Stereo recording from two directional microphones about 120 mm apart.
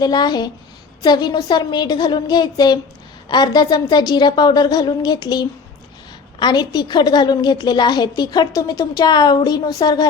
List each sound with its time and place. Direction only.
0.0 s a woman's voice: 35° left (ahead or behind)